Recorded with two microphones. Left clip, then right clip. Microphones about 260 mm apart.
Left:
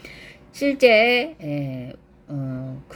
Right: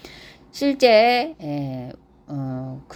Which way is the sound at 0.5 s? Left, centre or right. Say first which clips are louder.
Even; centre.